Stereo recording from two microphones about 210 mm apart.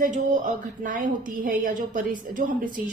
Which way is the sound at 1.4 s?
40° right (ahead or behind).